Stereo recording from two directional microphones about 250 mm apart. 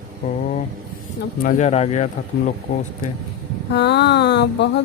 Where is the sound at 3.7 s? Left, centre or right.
Left.